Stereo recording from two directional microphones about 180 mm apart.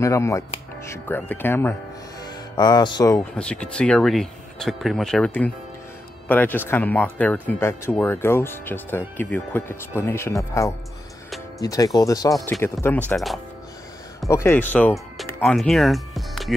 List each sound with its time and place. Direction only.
0.0 s speech: 15° left (ahead or behind)
2.5 s speech: 25° left (ahead or behind)
3.3 s speech: 5° left (ahead or behind)
14.2 s speech: 15° left (ahead or behind)